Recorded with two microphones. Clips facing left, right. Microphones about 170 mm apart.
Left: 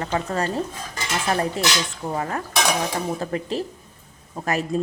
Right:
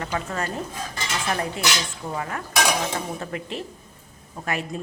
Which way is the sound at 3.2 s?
35° left (ahead or behind).